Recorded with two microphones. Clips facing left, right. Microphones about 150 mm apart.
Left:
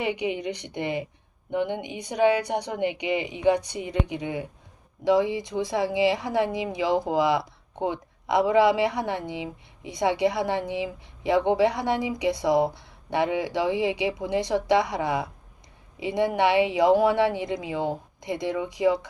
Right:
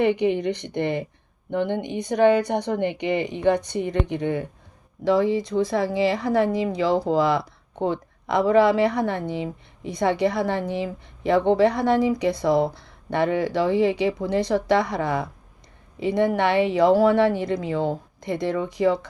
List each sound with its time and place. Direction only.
0.0 s speech: 10° left (ahead or behind)